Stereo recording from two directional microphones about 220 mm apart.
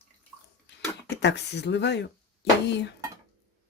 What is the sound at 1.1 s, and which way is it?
Speech, 50° left (ahead or behind).